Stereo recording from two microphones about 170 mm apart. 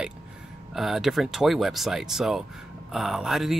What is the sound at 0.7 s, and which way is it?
Speech, centre (ahead or behind).